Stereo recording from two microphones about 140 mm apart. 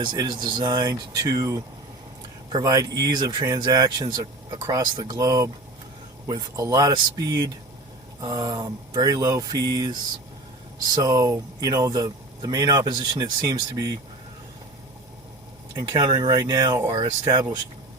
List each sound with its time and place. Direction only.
0.0 s speech: 30° right (ahead or behind)
15.7 s speech: 25° right (ahead or behind)